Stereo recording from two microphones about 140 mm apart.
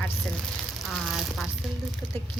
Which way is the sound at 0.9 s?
Centre (ahead or behind).